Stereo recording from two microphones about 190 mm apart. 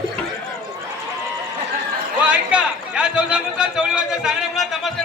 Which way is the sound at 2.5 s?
5° right (ahead or behind).